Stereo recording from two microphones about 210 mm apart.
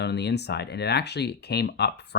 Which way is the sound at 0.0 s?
55° left (ahead or behind).